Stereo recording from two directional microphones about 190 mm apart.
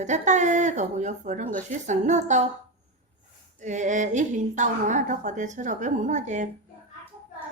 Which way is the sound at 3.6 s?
40° right (ahead or behind).